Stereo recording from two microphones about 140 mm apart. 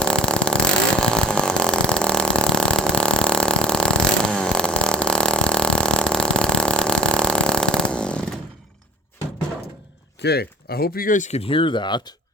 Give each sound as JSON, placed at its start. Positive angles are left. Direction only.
{"t": 0.0, "sound": "chainsaw", "side_deg": 5}
{"t": 10.7, "sound": "speech", "side_deg": 90}